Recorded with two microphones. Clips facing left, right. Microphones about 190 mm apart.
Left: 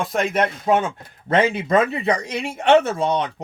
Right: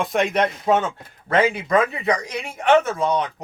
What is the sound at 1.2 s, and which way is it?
Speech, 25° left (ahead or behind).